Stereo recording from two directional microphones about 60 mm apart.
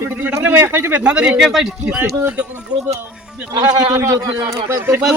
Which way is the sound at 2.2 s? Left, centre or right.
Centre.